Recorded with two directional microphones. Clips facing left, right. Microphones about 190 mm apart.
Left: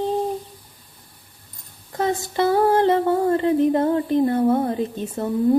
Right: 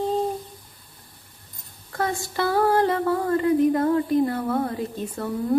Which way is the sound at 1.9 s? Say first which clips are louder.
Left 4 dB; 20° left (ahead or behind).